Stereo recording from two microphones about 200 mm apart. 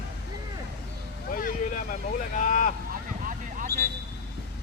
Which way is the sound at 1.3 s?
45° left (ahead or behind).